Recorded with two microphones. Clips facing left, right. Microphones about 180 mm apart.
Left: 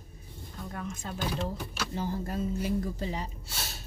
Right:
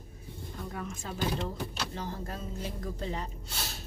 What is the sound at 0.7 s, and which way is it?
Speech, centre (ahead or behind).